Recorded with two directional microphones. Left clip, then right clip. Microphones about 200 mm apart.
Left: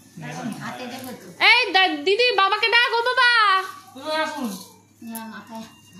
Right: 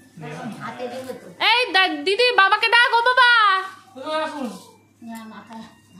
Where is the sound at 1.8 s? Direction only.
20° right (ahead or behind).